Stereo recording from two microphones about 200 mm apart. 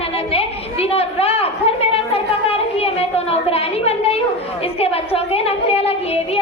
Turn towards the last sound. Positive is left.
turn(degrees=30)  # may be behind; listen again after turning